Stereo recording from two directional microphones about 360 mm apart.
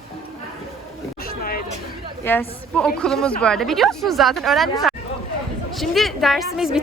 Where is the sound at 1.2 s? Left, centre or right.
Left.